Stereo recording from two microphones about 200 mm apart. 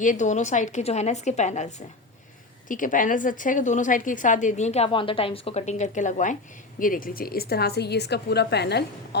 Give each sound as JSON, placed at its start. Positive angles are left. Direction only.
{"t": 0.0, "sound": "a woman's voice", "side_deg": 40}